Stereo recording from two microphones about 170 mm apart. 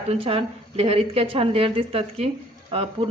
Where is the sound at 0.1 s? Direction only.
30° right (ahead or behind).